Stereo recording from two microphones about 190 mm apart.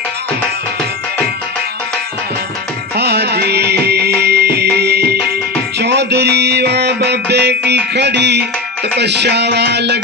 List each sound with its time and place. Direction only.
3.0 s music: 60° right (ahead or behind)